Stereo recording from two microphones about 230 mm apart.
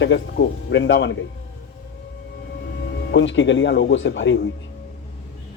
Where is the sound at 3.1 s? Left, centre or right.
Left.